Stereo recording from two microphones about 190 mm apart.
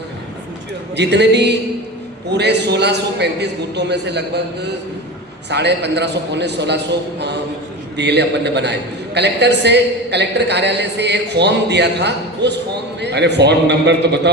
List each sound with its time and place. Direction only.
0.9 s a man's voice: 65° right (ahead or behind)
5.5 s a man's voice: 65° right (ahead or behind)
7.9 s a man's voice: 65° right (ahead or behind)